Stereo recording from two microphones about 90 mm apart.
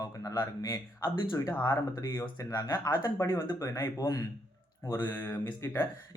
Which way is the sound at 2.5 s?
45° left (ahead or behind).